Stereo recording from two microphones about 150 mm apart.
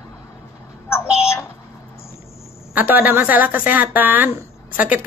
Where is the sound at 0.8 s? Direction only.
15° left (ahead or behind).